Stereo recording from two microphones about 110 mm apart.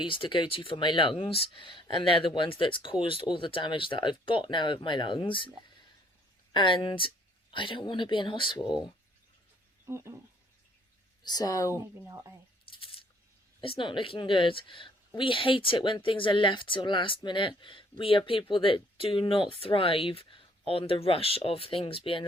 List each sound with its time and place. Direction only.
0.0 s a woman's voice: 50° left (ahead or behind)
9.8 s a sound: 25° right (ahead or behind)
11.2 s speech: 40° left (ahead or behind)
11.7 s speech: 30° right (ahead or behind)
12.7 s a sound: 55° left (ahead or behind)
13.6 s a woman's voice: 50° left (ahead or behind)